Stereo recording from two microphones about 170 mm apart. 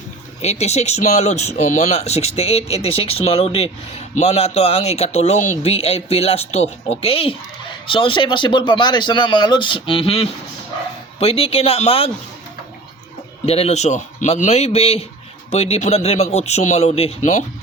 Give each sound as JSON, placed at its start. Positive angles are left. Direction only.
{"t": 0.4, "sound": "speech", "side_deg": 40}
{"t": 13.4, "sound": "speech", "side_deg": 35}